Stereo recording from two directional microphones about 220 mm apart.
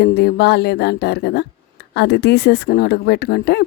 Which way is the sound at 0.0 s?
45° left (ahead or behind).